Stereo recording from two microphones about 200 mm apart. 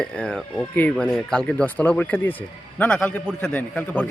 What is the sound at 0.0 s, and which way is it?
A man's voice, 5° left (ahead or behind).